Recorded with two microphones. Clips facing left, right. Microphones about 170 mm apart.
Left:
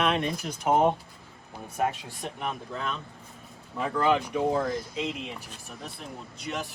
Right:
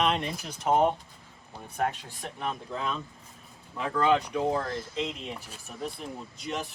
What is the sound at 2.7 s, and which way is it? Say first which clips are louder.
Speech: right 1 dB; centre (ahead or behind).